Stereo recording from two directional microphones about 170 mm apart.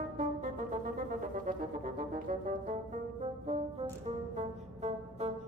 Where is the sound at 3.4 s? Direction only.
35° right (ahead or behind).